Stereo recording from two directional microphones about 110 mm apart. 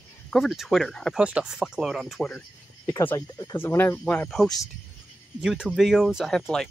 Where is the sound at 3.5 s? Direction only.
20° left (ahead or behind).